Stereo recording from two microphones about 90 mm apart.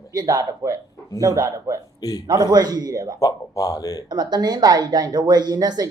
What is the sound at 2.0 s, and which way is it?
Speech, 40° left (ahead or behind).